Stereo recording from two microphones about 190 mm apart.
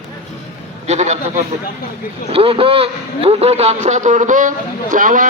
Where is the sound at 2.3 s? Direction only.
30° right (ahead or behind); by 5.3 s 45° right (ahead or behind).